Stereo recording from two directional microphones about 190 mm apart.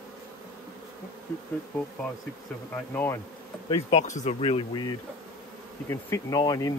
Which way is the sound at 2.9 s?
10° left (ahead or behind).